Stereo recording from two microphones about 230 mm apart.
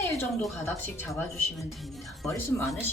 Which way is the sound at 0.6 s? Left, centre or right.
Centre.